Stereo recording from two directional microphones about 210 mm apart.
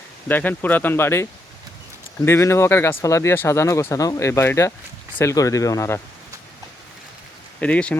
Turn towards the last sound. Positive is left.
turn(degrees=5)  # may be behind; listen again after turning